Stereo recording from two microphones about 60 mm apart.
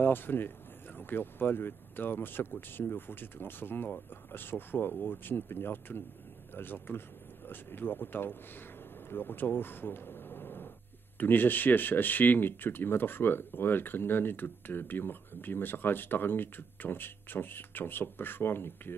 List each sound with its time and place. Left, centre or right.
0.0 s speech: left